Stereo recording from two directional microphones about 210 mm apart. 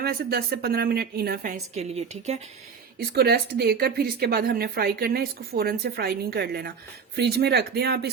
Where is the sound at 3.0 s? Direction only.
50° right (ahead or behind).